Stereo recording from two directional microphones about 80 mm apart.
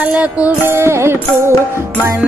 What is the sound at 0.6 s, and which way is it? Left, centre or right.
Music, right.